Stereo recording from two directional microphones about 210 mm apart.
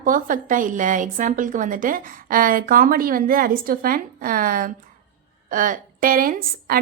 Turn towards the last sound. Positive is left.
turn(degrees=-40)  # may be behind; listen again after turning